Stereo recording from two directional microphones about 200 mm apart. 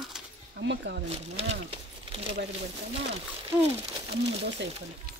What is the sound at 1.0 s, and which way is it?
Speech, 30° right (ahead or behind).